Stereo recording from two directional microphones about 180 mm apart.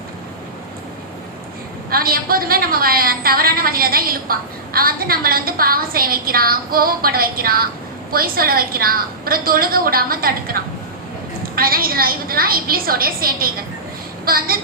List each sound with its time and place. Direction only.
1.9 s a woman's voice: 55° right (ahead or behind)